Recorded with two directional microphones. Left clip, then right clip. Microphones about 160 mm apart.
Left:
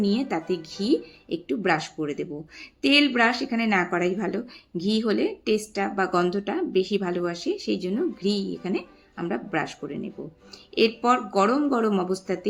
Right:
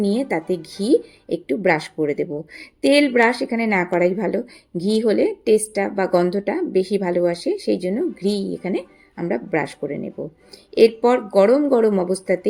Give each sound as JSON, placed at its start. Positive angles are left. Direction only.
{"t": 0.0, "sound": "speech", "side_deg": -20}